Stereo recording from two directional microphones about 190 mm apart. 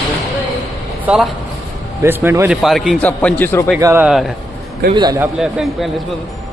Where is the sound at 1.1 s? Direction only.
5° right (ahead or behind); by 3.7 s 10° left (ahead or behind).